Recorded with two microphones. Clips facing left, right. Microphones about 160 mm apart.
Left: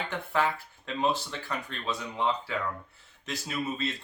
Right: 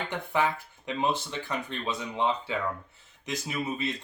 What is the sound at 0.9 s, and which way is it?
Speech, 15° right (ahead or behind).